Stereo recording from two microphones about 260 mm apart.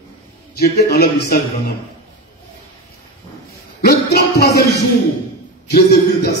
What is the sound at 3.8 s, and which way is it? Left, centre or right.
Music, left.